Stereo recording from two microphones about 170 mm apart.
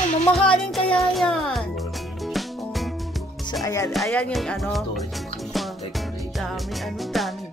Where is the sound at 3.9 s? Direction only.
5° left (ahead or behind).